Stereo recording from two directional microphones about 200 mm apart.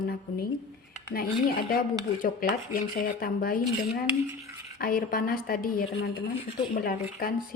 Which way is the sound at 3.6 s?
10° right (ahead or behind).